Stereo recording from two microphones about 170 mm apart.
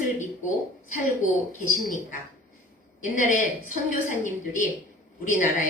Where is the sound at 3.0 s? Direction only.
50° left (ahead or behind).